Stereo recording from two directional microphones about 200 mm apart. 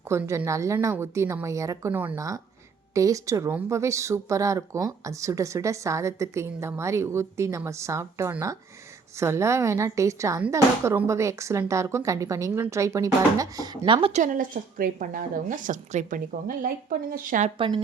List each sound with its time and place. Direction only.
0.1 s speech: 15° right (ahead or behind)
14.2 s a woman's voice: 40° right (ahead or behind)